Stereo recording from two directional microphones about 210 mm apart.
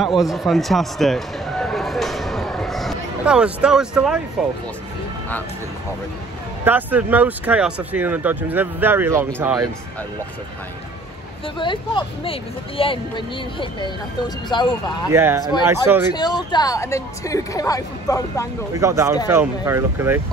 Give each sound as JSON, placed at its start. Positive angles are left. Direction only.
{"t": 0.0, "sound": "a sound", "side_deg": 0}
{"t": 6.6, "sound": "speech", "side_deg": -10}
{"t": 11.4, "sound": "speech", "side_deg": 25}
{"t": 15.0, "sound": "speech", "side_deg": -10}
{"t": 16.1, "sound": "speech", "side_deg": 20}
{"t": 18.7, "sound": "speech", "side_deg": -15}